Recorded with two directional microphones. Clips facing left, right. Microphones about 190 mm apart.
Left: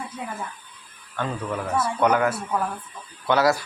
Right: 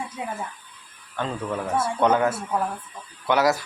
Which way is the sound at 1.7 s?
25° right (ahead or behind).